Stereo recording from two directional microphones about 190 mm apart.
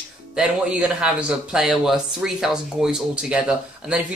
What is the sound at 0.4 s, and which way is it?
Speech, 5° right (ahead or behind).